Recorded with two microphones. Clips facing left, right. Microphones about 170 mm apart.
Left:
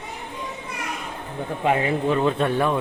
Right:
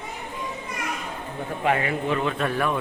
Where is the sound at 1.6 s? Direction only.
20° left (ahead or behind).